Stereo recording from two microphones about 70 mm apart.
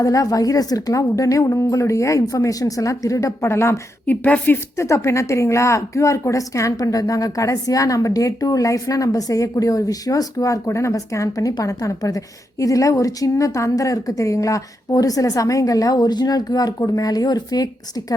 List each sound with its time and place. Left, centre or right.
0.0 s speech: left
4.0 s a woman's voice: left
4.8 s a woman's voice: left